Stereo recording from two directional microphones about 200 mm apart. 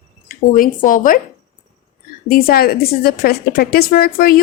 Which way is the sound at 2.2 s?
45° left (ahead or behind).